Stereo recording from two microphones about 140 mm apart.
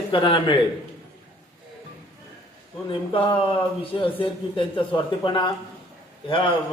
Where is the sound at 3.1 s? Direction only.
40° left (ahead or behind).